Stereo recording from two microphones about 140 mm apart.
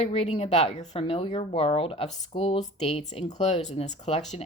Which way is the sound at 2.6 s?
50° left (ahead or behind).